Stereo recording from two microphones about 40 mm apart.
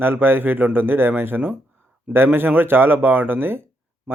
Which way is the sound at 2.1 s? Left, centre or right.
Right.